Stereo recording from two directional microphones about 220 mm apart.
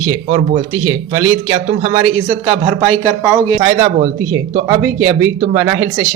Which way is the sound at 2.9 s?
10° left (ahead or behind).